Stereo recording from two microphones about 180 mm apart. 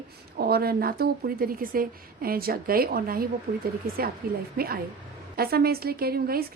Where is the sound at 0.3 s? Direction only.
60° right (ahead or behind).